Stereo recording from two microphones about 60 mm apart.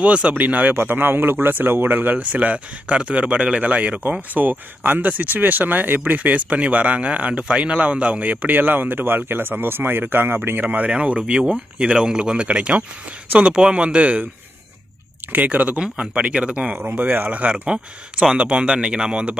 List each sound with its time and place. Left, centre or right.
0.0 s speech: right
10.9 s speech: centre
15.3 s speech: right
16.8 s speech: right; by 19.3 s centre